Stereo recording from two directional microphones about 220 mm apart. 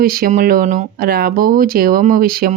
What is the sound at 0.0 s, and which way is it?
Speech, 40° right (ahead or behind).